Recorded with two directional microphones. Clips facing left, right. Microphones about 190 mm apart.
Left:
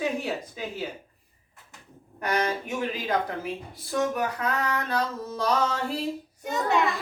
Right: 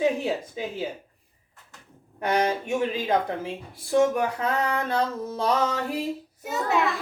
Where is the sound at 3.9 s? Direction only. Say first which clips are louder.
Right 5 dB; 25° right (ahead or behind).